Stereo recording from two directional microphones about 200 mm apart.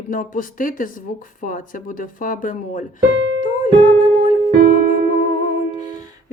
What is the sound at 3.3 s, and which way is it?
Music, 40° left (ahead or behind).